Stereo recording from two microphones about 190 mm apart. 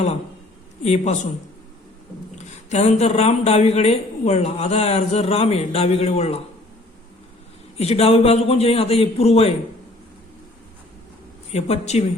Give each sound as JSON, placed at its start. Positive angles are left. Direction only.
{"t": 0.9, "sound": "a woman's voice", "side_deg": 35}
{"t": 2.5, "sound": "a woman's voice", "side_deg": 35}
{"t": 7.8, "sound": "a woman's voice", "side_deg": 30}
{"t": 11.5, "sound": "a woman's voice", "side_deg": 35}